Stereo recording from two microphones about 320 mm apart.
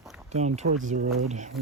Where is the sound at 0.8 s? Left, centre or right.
Right.